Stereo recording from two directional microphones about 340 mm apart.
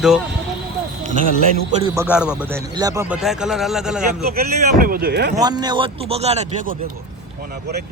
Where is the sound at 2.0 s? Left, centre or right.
Centre.